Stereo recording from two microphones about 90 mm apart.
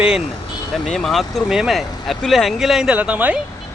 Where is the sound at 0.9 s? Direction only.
5° left (ahead or behind).